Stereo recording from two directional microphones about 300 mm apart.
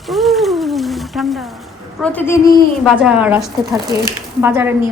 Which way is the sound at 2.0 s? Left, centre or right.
Centre.